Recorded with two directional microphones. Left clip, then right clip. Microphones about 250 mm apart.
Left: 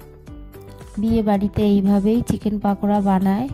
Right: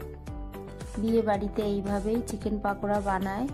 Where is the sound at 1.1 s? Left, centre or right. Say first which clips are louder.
Left 5 dB; left.